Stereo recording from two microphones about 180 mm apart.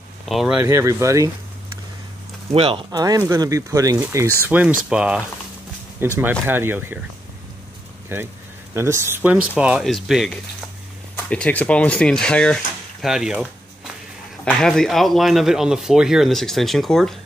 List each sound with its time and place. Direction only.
0.3 s a man's voice: centre (ahead or behind)
0.7 s speech: 15° right (ahead or behind)
2.5 s a man's voice: 30° right (ahead or behind); by 7.0 s 10° right (ahead or behind)
8.1 s a man's voice: 15° right (ahead or behind)